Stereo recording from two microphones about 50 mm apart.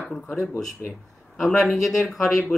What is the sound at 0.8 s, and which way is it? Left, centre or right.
Speech, left.